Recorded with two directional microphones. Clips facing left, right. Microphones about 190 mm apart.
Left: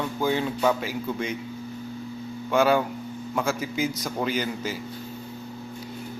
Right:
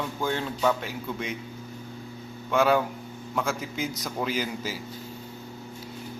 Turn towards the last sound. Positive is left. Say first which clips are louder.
# left 2 dB
turn(degrees=-5)  # may be behind; listen again after turning